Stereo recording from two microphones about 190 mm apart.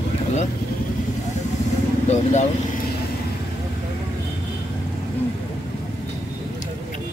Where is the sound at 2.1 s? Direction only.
40° left (ahead or behind).